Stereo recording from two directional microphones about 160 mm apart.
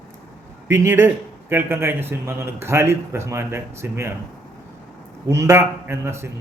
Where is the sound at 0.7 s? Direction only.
15° right (ahead or behind).